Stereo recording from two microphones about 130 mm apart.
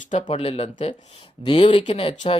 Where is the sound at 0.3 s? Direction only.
50° left (ahead or behind).